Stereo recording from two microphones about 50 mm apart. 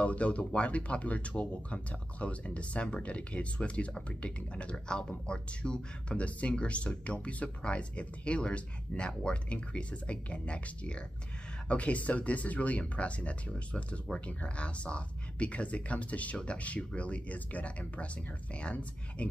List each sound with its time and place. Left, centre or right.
0.0 s speech: left